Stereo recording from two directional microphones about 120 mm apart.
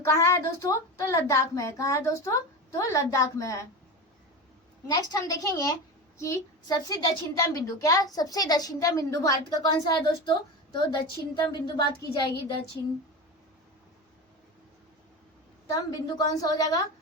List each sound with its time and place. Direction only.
0.0 s a child's voice: 25° left (ahead or behind)
4.9 s a child's voice: 30° left (ahead or behind)
15.7 s a woman's voice: 35° left (ahead or behind)